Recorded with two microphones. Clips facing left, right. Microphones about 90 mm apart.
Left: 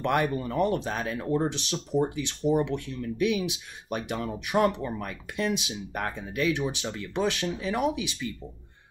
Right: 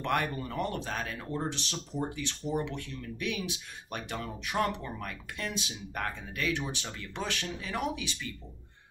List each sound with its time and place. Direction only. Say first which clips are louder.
0.0 s speech: left 5 dB; 15° left (ahead or behind)